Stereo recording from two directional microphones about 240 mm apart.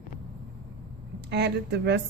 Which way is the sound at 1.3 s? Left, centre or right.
Right.